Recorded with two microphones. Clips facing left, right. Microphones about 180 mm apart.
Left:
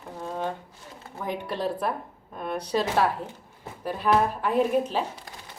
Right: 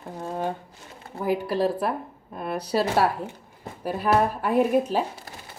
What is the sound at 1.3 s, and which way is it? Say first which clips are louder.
Speech: right 7 dB; 5° right (ahead or behind).